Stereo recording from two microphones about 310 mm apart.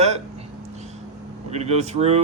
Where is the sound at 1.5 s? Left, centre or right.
Right.